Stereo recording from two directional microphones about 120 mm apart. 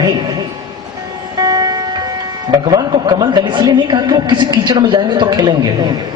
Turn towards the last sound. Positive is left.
turn(degrees=-35)  # may be behind; listen again after turning